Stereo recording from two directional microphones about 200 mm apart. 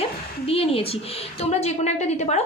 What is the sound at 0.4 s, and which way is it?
A woman's voice, 30° left (ahead or behind).